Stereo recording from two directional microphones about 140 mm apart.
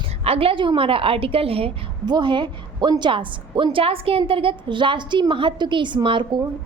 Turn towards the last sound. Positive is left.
turn(degrees=-35)  # may be behind; listen again after turning